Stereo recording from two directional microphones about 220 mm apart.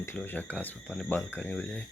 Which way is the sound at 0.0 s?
10° left (ahead or behind).